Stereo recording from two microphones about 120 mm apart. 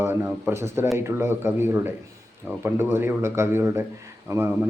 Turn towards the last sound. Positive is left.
turn(degrees=-20)  # may be behind; listen again after turning